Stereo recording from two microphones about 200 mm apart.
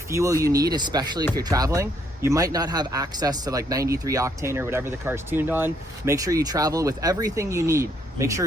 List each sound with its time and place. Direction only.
0.1 s speech: 15° right (ahead or behind)